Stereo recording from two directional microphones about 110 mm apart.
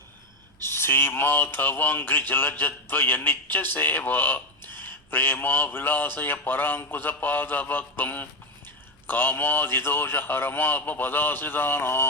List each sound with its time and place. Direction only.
0.6 s speech: 20° left (ahead or behind)